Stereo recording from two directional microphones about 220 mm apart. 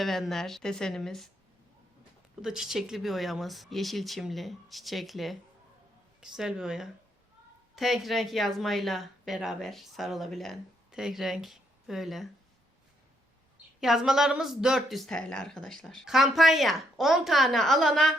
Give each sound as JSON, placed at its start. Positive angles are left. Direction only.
{"t": 0.0, "sound": "speech", "side_deg": 0}
{"t": 2.4, "sound": "speech", "side_deg": 0}
{"t": 13.8, "sound": "speech", "side_deg": 0}